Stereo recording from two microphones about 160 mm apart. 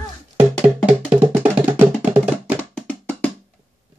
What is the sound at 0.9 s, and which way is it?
Music, 10° right (ahead or behind).